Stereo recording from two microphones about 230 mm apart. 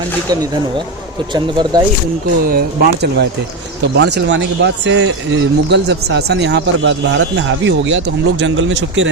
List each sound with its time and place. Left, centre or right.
1.3 s speech: centre
2.5 s speech: right